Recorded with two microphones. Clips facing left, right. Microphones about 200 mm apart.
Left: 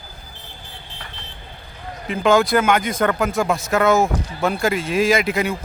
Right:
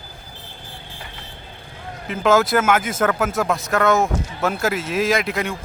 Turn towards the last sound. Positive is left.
turn(degrees=0)  # may be behind; listen again after turning